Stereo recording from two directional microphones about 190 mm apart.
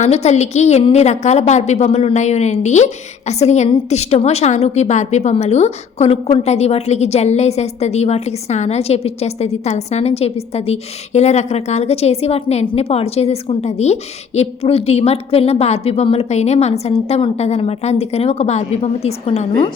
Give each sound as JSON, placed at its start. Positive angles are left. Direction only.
{"t": 0.0, "sound": "a woman's voice", "side_deg": 35}